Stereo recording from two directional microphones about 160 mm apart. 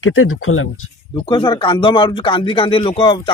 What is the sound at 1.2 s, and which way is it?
Speech, 30° left (ahead or behind).